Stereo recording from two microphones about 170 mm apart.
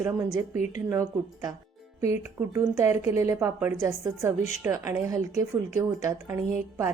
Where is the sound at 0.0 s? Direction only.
15° right (ahead or behind).